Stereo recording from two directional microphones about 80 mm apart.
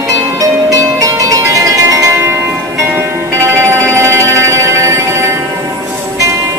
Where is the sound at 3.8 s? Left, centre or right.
Right.